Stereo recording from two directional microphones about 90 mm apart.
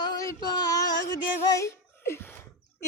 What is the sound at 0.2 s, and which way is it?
Music, 45° left (ahead or behind).